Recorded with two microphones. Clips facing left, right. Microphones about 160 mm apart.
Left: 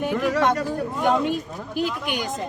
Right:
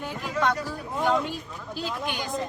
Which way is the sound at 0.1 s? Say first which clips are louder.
Left 8 dB; 75° left (ahead or behind).